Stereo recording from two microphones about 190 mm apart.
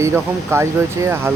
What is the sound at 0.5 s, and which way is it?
Speech, 15° right (ahead or behind).